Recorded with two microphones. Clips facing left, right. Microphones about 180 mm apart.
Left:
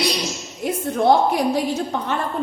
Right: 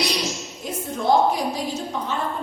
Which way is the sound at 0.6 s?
65° left (ahead or behind).